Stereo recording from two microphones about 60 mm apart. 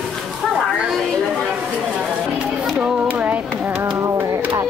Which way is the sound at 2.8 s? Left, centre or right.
Right.